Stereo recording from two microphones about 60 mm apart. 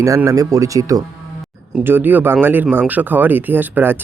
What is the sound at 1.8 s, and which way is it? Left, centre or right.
Speech, right.